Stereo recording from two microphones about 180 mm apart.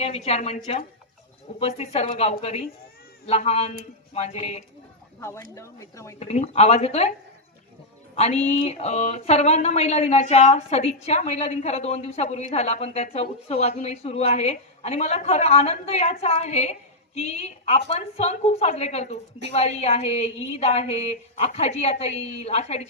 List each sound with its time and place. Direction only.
0.3 s speech: 35° left (ahead or behind)
5.5 s speech: 15° left (ahead or behind)
6.1 s speech: 40° left (ahead or behind)
8.1 s speech: 35° left (ahead or behind)